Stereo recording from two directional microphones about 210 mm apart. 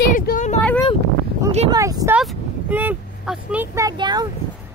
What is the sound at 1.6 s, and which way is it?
Speech, 15° right (ahead or behind).